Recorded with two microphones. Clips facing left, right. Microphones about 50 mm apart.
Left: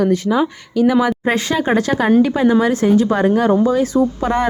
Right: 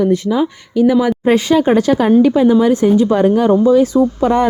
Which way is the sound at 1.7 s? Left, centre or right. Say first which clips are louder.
Right 4 dB; left.